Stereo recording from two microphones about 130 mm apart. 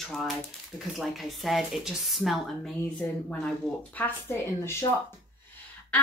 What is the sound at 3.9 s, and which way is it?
Speech, 15° left (ahead or behind).